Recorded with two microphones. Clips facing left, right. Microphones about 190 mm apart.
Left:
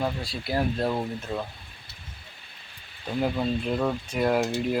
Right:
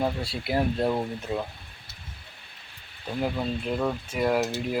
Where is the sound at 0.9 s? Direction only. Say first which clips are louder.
Right 1 dB; 10° right (ahead or behind).